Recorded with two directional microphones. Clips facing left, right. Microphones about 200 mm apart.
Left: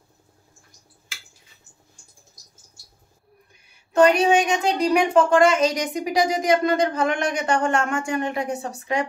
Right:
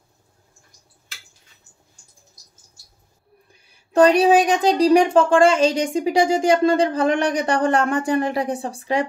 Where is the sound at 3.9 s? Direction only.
35° right (ahead or behind).